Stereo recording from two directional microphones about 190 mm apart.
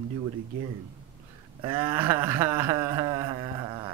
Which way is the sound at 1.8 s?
10° right (ahead or behind).